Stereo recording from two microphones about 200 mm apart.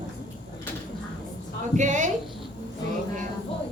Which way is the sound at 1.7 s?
35° right (ahead or behind).